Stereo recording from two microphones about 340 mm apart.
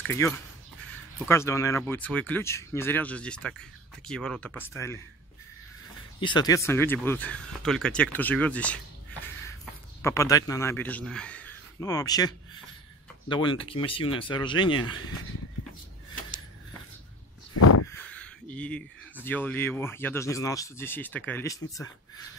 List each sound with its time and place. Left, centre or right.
0.0 s speech: centre
6.2 s speech: centre
10.0 s speech: centre
17.6 s a sound: left
17.9 s speech: centre